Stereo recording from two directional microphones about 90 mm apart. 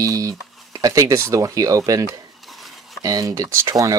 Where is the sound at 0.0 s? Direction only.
40° right (ahead or behind).